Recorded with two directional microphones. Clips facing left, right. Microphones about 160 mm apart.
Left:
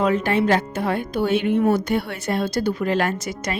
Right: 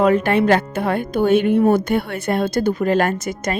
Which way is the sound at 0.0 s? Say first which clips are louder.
Right 4 dB; 60° right (ahead or behind).